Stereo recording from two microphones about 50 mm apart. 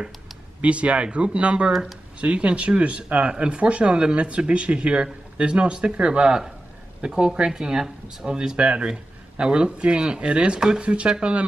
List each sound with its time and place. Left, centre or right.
0.6 s speech: right